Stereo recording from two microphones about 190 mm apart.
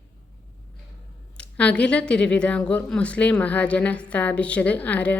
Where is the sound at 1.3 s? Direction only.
5° left (ahead or behind).